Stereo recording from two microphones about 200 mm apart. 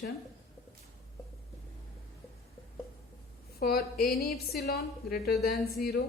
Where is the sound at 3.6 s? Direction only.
50° left (ahead or behind).